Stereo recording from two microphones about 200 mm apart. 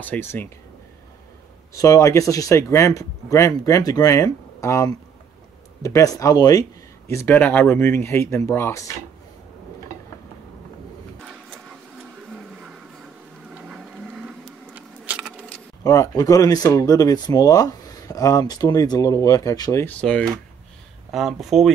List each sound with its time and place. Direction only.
0.0 s speech: 10° left (ahead or behind)
1.7 s speech: 15° left (ahead or behind)
13.6 s a sound: centre (ahead or behind)
14.8 s keys jangling: 5° right (ahead or behind)
15.8 s speech: 15° left (ahead or behind); by 21.7 s centre (ahead or behind)